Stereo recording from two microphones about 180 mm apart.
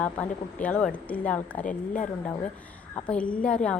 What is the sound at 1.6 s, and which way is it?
Speech, 45° left (ahead or behind).